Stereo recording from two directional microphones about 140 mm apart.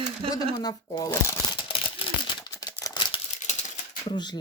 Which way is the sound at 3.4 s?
60° left (ahead or behind).